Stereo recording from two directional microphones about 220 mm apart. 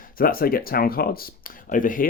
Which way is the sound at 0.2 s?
40° left (ahead or behind).